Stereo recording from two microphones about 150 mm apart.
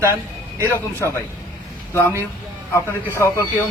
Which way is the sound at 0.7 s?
15° left (ahead or behind).